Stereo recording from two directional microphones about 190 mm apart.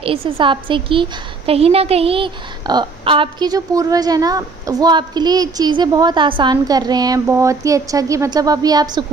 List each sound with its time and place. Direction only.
0.0 s a woman's voice: 30° right (ahead or behind)